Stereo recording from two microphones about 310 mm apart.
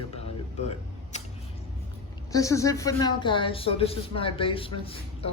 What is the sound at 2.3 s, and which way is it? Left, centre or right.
A man's voice, centre.